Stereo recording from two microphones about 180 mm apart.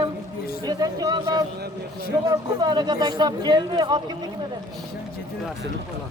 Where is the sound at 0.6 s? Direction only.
20° right (ahead or behind).